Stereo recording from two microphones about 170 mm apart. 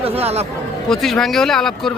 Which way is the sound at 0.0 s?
35° right (ahead or behind).